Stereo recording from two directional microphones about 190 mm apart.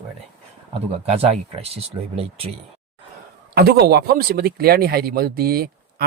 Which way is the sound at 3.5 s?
55° right (ahead or behind).